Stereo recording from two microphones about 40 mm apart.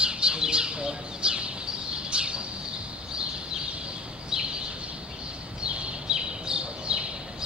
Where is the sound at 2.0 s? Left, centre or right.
Right.